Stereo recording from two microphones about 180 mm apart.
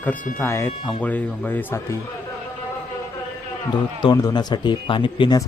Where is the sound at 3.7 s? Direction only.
25° left (ahead or behind).